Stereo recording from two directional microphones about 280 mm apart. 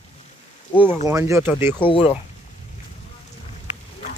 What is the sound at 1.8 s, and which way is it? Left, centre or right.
Speech, centre.